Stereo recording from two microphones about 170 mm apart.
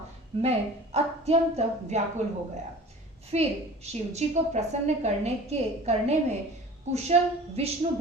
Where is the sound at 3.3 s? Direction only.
40° right (ahead or behind).